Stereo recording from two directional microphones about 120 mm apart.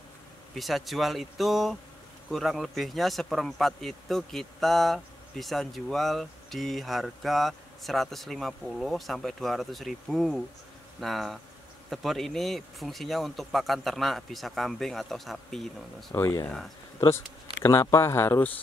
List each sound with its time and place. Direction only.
0.6 s speech: centre (ahead or behind)
16.2 s speech: 20° left (ahead or behind)
17.6 s speech: 25° left (ahead or behind)